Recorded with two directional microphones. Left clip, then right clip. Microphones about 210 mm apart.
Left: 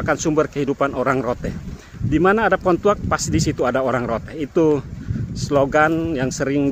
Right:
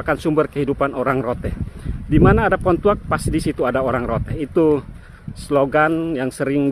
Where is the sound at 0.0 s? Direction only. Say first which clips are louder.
Even; 5° right (ahead or behind).